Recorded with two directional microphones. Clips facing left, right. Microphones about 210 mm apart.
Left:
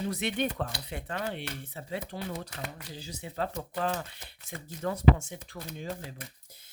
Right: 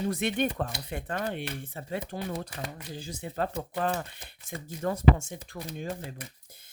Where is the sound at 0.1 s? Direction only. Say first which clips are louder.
Right 3 dB; 50° right (ahead or behind).